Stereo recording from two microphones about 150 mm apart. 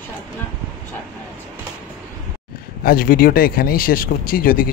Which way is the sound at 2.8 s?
75° left (ahead or behind).